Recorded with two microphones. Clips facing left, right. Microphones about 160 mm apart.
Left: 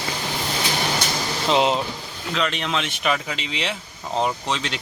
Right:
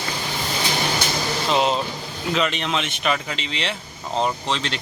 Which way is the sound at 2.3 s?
5° right (ahead or behind).